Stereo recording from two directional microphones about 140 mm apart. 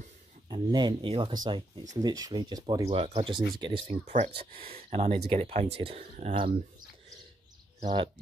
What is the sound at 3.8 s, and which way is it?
Speech, 55° right (ahead or behind).